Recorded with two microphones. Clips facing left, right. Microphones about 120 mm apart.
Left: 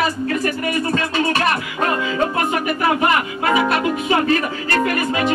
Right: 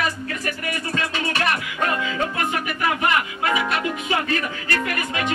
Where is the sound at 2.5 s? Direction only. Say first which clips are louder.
Left 5 dB; 35° left (ahead or behind).